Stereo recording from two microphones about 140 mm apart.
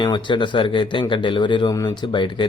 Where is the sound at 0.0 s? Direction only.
35° left (ahead or behind).